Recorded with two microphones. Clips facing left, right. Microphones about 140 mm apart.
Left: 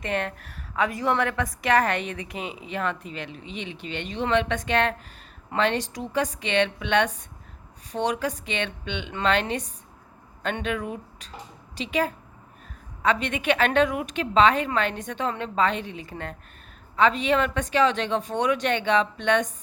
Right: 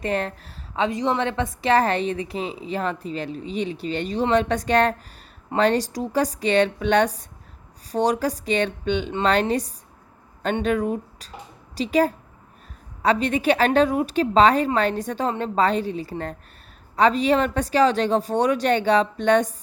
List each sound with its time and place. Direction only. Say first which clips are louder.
0.0 s a woman's voice: right 3 dB; 35° right (ahead or behind)